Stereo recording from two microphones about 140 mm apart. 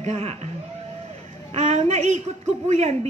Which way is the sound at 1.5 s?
55° right (ahead or behind).